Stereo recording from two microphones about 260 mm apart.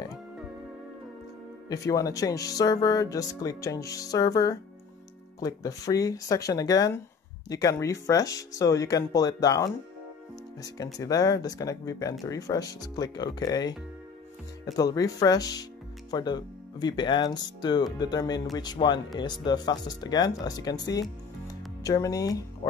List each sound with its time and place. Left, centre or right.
1.7 s speech: centre
11.0 s speech: centre
21.5 s music: centre